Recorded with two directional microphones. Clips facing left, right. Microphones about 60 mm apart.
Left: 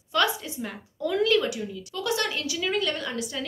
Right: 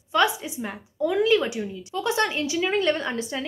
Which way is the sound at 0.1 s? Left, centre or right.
Right.